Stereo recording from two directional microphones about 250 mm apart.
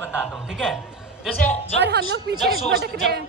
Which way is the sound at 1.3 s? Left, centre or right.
Left.